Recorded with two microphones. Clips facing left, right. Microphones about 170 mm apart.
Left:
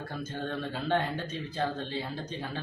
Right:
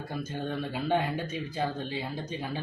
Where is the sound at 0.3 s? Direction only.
10° right (ahead or behind).